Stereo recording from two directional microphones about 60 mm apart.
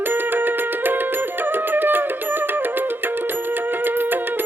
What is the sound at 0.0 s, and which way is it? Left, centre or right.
Music, right.